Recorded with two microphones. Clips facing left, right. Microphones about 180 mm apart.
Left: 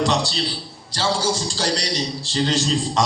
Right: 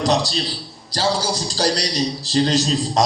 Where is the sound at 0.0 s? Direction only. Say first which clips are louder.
Right 2 dB; 40° right (ahead or behind).